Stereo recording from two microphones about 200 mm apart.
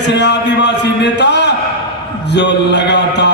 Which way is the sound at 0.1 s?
60° left (ahead or behind).